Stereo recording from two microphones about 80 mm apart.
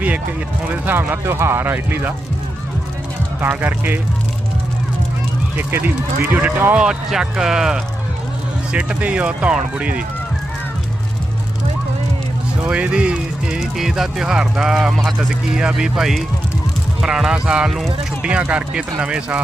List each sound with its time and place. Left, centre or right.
0.0 s speech: right
3.6 s speech: right
5.5 s speech: right
6.7 s speech: centre
12.6 s speech: centre